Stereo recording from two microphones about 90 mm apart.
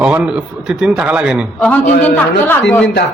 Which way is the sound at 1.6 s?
10° left (ahead or behind).